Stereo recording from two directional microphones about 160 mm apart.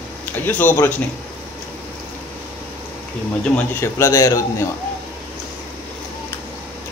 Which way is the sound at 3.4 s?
10° left (ahead or behind).